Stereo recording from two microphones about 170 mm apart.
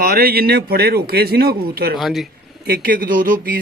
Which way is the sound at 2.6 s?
60° right (ahead or behind).